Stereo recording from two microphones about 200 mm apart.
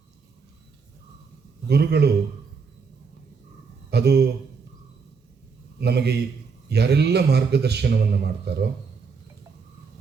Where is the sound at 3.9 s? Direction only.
55° right (ahead or behind).